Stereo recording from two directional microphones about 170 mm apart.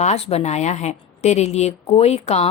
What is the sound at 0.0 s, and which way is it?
Speech, 40° left (ahead or behind).